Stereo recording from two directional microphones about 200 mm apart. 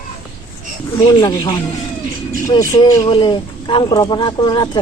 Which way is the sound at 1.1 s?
20° left (ahead or behind).